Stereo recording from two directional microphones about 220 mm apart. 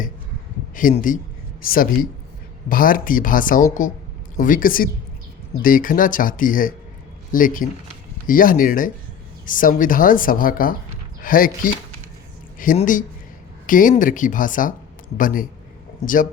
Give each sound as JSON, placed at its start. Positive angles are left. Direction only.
{"t": 0.8, "sound": "speech", "side_deg": 35}